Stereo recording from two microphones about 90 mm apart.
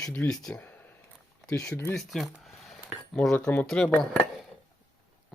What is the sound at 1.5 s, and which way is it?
Speech, 35° left (ahead or behind).